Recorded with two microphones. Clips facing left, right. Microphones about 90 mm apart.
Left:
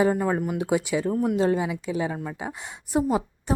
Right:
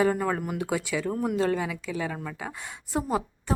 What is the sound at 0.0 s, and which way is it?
A woman's voice, 15° left (ahead or behind).